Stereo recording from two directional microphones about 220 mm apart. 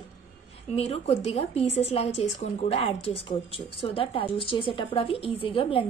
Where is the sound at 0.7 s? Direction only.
30° left (ahead or behind).